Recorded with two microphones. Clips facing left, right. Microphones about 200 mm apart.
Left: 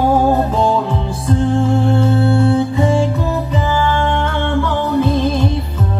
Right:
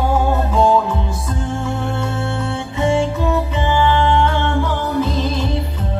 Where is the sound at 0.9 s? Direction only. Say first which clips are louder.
Left 4 dB; 30° left (ahead or behind); by 5.5 s 55° left (ahead or behind).